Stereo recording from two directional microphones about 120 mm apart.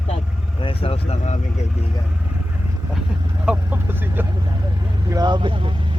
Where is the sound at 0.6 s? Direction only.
55° left (ahead or behind).